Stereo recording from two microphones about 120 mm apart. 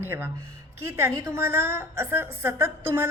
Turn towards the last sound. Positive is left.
turn(degrees=-20)  # may be behind; listen again after turning